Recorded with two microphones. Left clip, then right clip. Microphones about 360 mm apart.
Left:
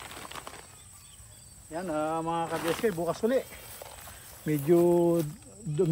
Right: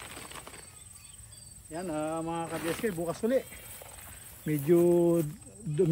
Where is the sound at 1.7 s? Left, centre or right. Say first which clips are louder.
Left 3 dB; centre.